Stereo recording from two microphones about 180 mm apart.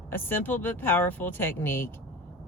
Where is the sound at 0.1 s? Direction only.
10° left (ahead or behind).